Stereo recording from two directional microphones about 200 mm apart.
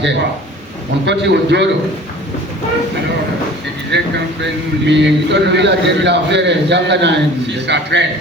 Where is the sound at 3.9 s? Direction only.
60° right (ahead or behind).